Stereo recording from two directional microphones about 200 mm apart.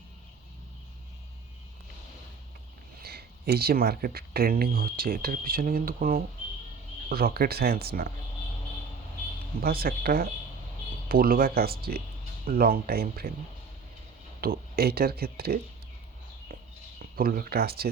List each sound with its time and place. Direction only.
3.0 s speech: 50° right (ahead or behind)
9.6 s speech: 50° right (ahead or behind)
14.4 s speech: 50° right (ahead or behind)
17.0 s speech: 45° right (ahead or behind)